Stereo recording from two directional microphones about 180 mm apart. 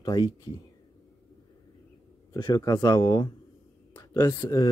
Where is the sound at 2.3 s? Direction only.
25° left (ahead or behind).